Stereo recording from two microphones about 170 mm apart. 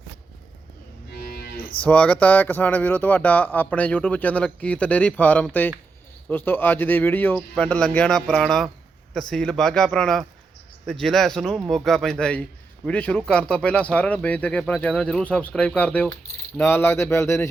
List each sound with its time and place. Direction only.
1.1 s livestock: 65° left (ahead or behind)
1.8 s a man's voice: 5° left (ahead or behind)